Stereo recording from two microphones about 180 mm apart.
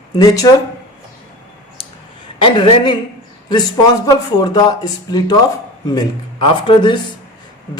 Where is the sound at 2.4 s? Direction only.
30° left (ahead or behind).